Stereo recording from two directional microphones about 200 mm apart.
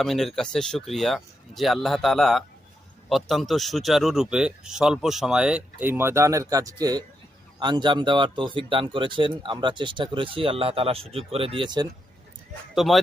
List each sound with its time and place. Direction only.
0.0 s speech: centre (ahead or behind); by 11.9 s 25° right (ahead or behind)
12.7 s speech: centre (ahead or behind)